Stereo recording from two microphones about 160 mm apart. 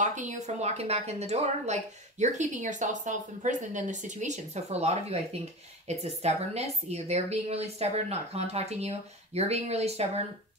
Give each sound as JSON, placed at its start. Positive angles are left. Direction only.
{"t": 0.0, "sound": "a woman's voice", "side_deg": -50}